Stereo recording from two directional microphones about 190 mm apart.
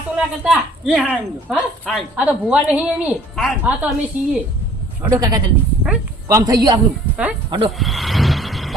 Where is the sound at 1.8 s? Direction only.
5° left (ahead or behind).